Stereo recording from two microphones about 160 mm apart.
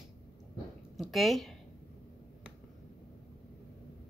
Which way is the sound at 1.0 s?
Centre (ahead or behind).